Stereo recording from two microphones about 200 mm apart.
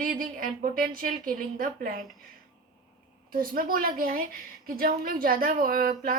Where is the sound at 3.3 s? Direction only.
45° right (ahead or behind).